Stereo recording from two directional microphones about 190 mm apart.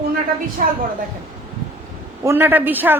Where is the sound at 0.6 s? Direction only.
45° right (ahead or behind).